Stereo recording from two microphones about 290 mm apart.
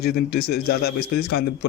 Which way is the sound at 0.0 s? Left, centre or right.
Left.